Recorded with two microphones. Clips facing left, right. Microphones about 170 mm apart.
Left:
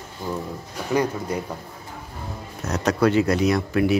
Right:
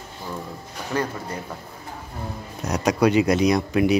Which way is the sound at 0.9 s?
10° left (ahead or behind).